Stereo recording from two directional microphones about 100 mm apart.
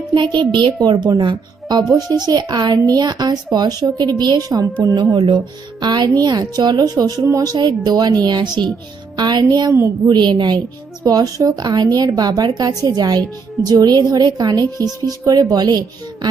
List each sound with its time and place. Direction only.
0.1 s a woman's voice: 50° right (ahead or behind)
5.1 s a woman's voice: 50° right (ahead or behind)